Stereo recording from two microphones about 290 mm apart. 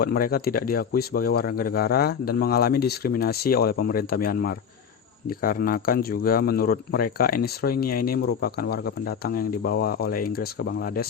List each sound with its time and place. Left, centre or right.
0.0 s speech: left